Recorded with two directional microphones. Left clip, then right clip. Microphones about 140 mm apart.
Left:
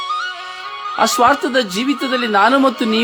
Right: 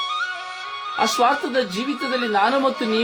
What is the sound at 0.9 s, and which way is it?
Speech, 70° left (ahead or behind).